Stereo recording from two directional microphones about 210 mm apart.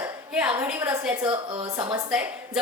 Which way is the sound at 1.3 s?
20° right (ahead or behind).